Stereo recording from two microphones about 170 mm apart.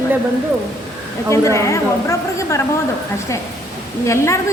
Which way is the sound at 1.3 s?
15° left (ahead or behind).